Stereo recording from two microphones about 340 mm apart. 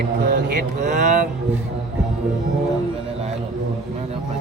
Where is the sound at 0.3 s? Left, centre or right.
Right.